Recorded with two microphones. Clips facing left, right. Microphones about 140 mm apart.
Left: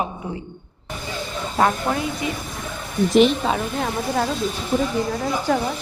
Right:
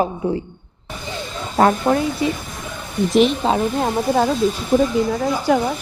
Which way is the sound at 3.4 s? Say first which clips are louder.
Right 5 dB; 30° right (ahead or behind).